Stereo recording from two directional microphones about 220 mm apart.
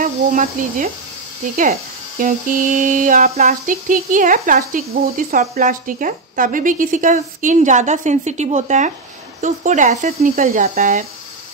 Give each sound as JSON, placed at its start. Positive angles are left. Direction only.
{"t": 0.0, "sound": "speech", "side_deg": -35}